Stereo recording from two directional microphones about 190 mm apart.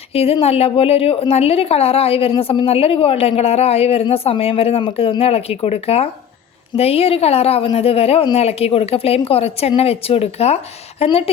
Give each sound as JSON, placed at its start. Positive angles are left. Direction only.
{"t": 0.1, "sound": "a woman's voice", "side_deg": 30}